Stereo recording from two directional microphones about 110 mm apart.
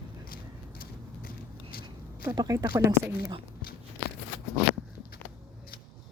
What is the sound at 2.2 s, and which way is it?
Speech, 35° right (ahead or behind).